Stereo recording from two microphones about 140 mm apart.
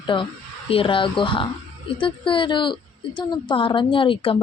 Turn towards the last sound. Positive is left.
turn(degrees=40)  # may be behind; listen again after turning